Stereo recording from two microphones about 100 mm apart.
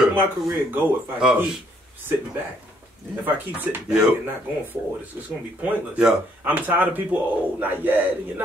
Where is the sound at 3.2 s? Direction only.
20° right (ahead or behind).